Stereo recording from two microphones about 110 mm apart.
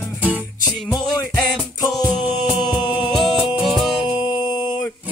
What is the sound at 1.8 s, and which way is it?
Music, 35° left (ahead or behind).